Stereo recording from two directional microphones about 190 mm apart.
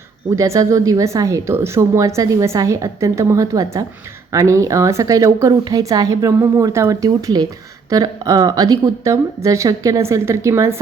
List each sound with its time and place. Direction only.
0.3 s a woman's voice: 15° right (ahead or behind)